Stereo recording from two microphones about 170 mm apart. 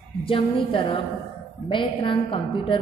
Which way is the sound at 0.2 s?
30° left (ahead or behind).